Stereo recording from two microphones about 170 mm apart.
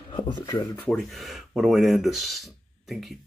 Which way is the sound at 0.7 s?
5° left (ahead or behind).